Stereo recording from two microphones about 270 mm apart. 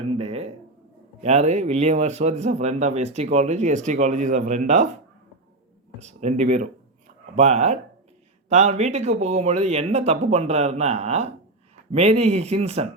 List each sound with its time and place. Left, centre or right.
0.2 s a sound: right
1.2 s a man's voice: right
6.0 s a man's voice: right